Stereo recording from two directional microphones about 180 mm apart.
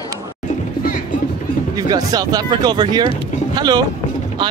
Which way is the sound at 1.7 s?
20° right (ahead or behind).